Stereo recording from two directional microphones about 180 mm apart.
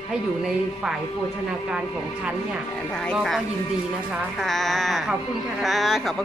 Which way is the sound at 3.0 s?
Centre (ahead or behind).